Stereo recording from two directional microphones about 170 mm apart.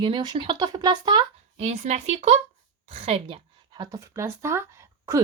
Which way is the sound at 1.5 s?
40° right (ahead or behind).